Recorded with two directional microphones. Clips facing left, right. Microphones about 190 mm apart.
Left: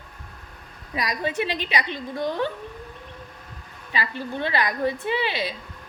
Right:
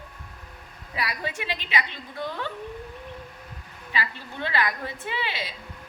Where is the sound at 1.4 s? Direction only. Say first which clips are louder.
Left 7 dB; 20° left (ahead or behind).